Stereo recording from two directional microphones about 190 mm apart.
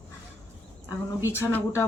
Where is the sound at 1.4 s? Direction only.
15° left (ahead or behind).